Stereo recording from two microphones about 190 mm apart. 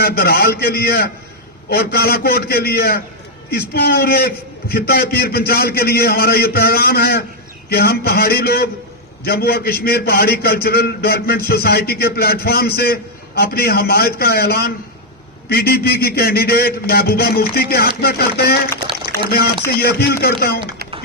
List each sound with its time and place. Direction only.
0.0 s a man's voice: 55° left (ahead or behind)